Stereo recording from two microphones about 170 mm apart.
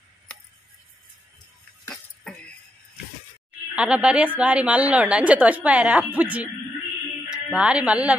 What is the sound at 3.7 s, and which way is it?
A woman's voice, 5° right (ahead or behind).